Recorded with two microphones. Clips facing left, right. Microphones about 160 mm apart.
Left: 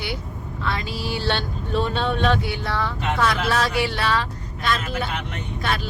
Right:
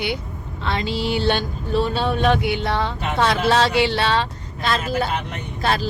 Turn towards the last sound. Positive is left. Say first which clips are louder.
# right 4 dB
turn(degrees=-35)  # may be behind; listen again after turning